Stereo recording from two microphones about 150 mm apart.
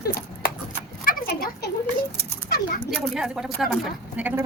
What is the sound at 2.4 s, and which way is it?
Bird, 90° left.